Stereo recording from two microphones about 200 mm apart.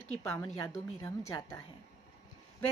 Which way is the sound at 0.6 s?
15° left (ahead or behind).